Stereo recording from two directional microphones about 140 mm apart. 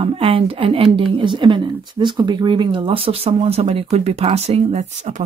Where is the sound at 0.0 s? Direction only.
40° right (ahead or behind).